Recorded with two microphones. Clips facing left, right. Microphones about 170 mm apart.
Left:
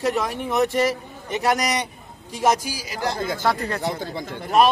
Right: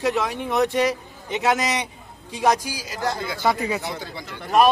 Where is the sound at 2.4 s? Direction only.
5° left (ahead or behind).